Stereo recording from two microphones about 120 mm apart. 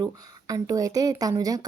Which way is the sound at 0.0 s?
30° right (ahead or behind).